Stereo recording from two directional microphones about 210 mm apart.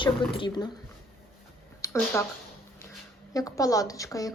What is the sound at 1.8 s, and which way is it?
Speech, 15° left (ahead or behind).